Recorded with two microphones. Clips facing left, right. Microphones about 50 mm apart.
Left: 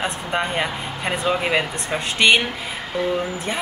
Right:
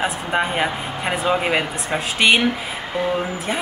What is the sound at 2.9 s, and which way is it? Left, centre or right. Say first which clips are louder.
Speech: right 1 dB; right.